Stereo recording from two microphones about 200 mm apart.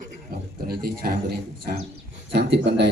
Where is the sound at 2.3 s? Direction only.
55° right (ahead or behind).